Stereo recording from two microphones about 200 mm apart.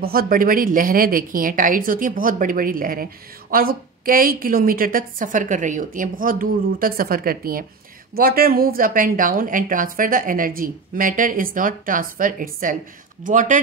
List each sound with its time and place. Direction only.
0.0 s a woman's voice: 50° right (ahead or behind)